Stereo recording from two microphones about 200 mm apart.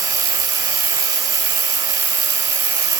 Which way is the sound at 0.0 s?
15° right (ahead or behind).